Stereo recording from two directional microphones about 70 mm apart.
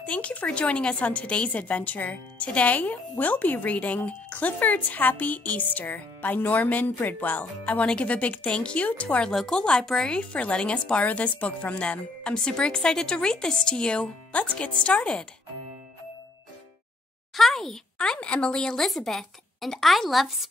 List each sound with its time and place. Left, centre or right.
0.0 s a woman's voice: centre
9.3 s speech: centre
9.6 s a woman's voice: centre
17.4 s speech: centre